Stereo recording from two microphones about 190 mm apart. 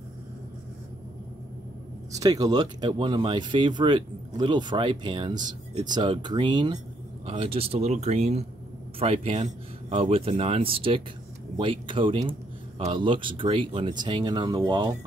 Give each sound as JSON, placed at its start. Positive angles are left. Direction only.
{"t": 2.1, "sound": "speech", "side_deg": -20}